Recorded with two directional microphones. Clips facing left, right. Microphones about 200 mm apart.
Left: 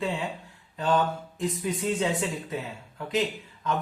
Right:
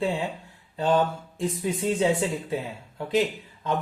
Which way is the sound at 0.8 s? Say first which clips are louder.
Right 2 dB; 25° right (ahead or behind).